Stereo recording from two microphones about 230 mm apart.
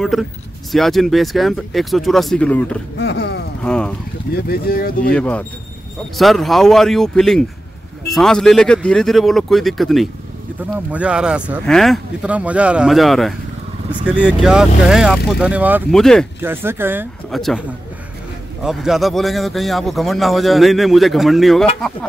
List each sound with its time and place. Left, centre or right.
0.1 s a man's voice: centre
3.0 s speech: left
3.6 s a man's voice: centre
4.3 s speech: left
5.1 s a man's voice: centre
16.3 s a man's voice: centre